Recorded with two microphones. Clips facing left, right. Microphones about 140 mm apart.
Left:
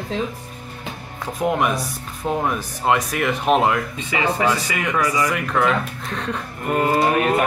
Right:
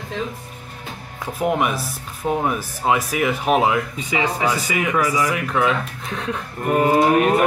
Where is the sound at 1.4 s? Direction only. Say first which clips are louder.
Even; 5° right (ahead or behind).